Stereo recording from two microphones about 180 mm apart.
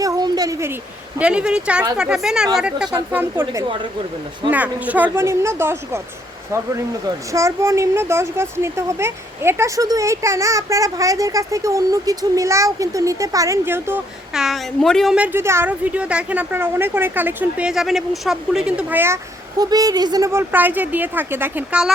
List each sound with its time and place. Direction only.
0.0 s a sound: 20° right (ahead or behind)
1.2 s a woman's voice: 5° right (ahead or behind)
7.3 s a woman's voice: 15° right (ahead or behind)